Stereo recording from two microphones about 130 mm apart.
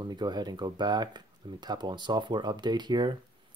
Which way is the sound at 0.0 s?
35° right (ahead or behind).